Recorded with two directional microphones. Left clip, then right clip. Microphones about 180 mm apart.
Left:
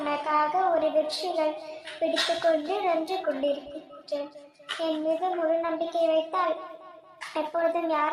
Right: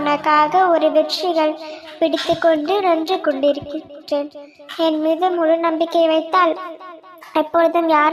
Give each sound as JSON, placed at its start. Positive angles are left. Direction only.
{"t": 0.0, "sound": "a woman's voice", "side_deg": -30}